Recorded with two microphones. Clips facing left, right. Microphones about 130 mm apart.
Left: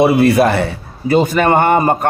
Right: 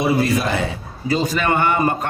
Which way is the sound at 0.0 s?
60° left (ahead or behind).